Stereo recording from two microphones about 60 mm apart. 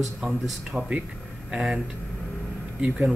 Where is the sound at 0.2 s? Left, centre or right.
Centre.